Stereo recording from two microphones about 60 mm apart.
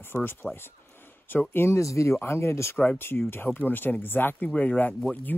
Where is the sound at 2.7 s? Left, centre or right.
Left.